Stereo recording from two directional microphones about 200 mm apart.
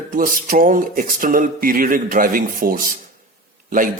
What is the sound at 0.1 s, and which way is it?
Speech, 40° right (ahead or behind).